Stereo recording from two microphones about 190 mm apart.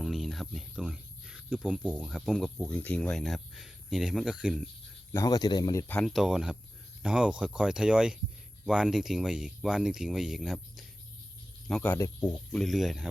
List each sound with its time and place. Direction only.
0.0 s speech: centre (ahead or behind)
5.1 s speech: 20° left (ahead or behind)
5.9 s speech: 5° left (ahead or behind)
12.5 s speech: centre (ahead or behind)